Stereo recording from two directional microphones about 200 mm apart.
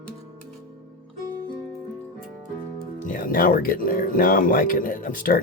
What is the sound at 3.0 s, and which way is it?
Speech, 45° left (ahead or behind).